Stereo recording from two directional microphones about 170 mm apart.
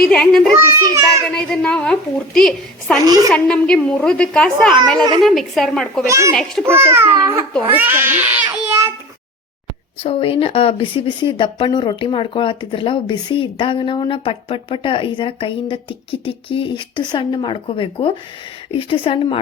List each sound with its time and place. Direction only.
0.0 s a woman's voice: 5° left (ahead or behind)
0.6 s speech: 15° right (ahead or behind)
1.3 s a woman's voice: 5° left (ahead or behind)
6.1 s speech: 15° right (ahead or behind)
6.3 s a woman's voice: centre (ahead or behind)
6.7 s speech: 15° right (ahead or behind)
10.0 s speech: 35° left (ahead or behind)